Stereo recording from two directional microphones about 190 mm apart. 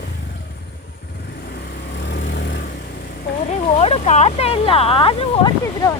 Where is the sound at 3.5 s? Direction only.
35° left (ahead or behind).